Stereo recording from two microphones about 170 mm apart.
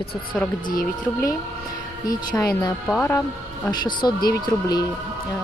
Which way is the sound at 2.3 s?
25° left (ahead or behind).